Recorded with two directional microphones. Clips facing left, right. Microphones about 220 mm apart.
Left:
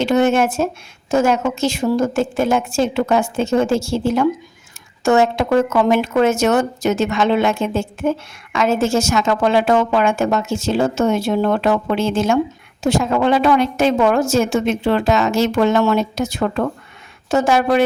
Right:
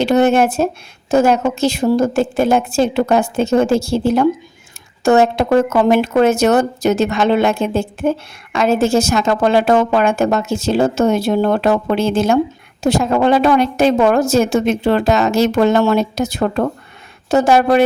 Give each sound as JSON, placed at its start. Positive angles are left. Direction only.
{"t": 0.0, "sound": "a woman's voice", "side_deg": -35}